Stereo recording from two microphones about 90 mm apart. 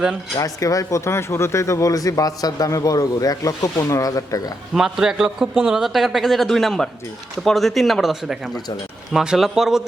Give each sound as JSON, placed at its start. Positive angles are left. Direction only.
{"t": 0.3, "sound": "speech", "side_deg": 40}
{"t": 4.7, "sound": "a man's voice", "side_deg": -5}